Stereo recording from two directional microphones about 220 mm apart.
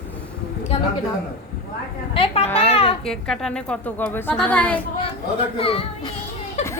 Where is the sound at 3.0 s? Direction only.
Centre (ahead or behind).